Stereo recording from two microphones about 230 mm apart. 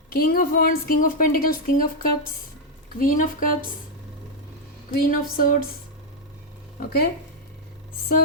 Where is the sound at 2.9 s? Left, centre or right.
Left.